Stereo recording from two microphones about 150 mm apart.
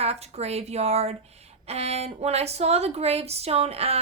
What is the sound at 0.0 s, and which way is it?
Speech, 45° right (ahead or behind).